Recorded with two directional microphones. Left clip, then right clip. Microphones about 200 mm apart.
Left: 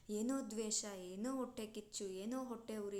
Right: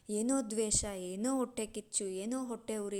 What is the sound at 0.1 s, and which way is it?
A woman's voice, 30° right (ahead or behind).